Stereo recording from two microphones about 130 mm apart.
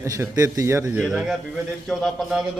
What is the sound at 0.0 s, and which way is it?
Speech, 25° right (ahead or behind).